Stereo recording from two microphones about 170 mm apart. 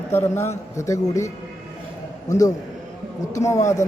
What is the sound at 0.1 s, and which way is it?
A man's voice, 15° left (ahead or behind).